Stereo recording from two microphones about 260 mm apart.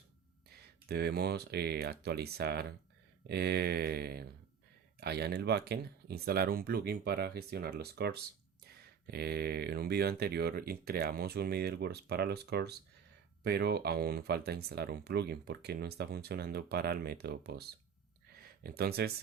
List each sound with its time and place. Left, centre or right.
0.9 s speech: right